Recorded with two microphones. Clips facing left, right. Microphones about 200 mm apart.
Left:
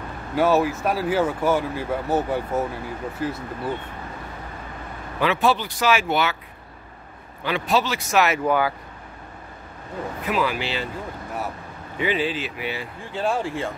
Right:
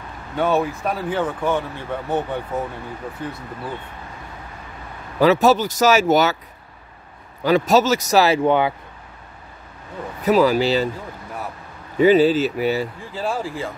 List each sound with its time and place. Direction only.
0.4 s speech: 5° left (ahead or behind)
5.2 s speech: 40° right (ahead or behind)
7.4 s speech: 40° right (ahead or behind); by 8.7 s 25° right (ahead or behind)
10.2 s speech: 40° right (ahead or behind)
12.0 s speech: 40° right (ahead or behind)
13.1 s speech: centre (ahead or behind)